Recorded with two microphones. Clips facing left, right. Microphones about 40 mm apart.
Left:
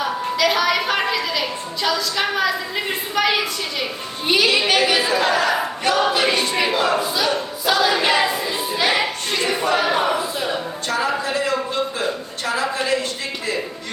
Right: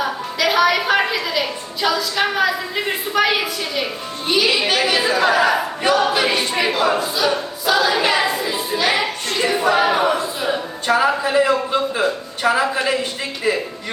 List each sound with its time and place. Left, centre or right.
0.0 s a woman's voice: centre
4.7 s choir: centre
10.4 s a man's voice: centre